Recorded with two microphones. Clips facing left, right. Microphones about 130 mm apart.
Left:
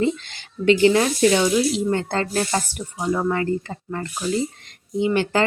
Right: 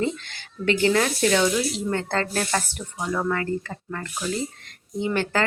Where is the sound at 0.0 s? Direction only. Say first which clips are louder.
Left 4 dB; 20° left (ahead or behind).